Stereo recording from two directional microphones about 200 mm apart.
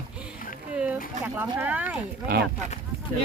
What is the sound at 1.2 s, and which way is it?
Speech, 10° right (ahead or behind).